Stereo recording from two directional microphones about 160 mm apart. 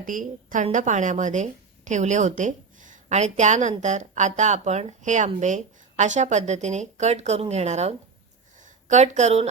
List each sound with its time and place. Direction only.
0.0 s speech: 55° right (ahead or behind)